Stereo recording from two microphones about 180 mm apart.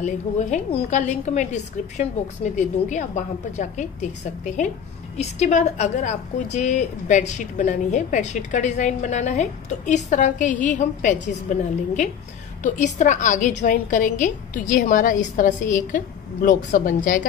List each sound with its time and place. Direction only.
0.0 s a woman's voice: 40° left (ahead or behind)